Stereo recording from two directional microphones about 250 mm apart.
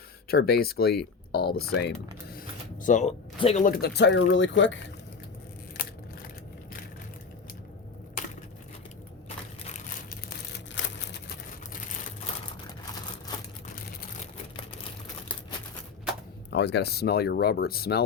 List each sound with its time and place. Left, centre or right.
0.3 s speech: left
2.8 s speech: left
10.8 s a sound: left
16.5 s speech: left